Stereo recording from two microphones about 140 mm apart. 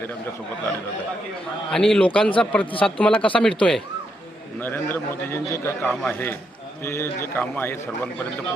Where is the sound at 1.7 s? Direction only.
5° left (ahead or behind).